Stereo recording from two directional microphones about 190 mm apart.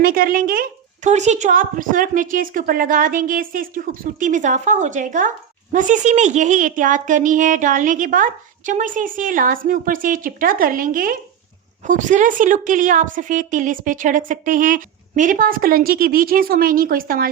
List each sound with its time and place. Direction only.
0.0 s a woman's voice: 50° right (ahead or behind)